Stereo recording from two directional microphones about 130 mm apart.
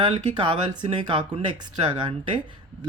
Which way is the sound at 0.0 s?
35° right (ahead or behind).